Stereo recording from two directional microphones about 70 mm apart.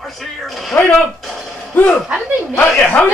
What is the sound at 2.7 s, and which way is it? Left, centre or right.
Speech, left.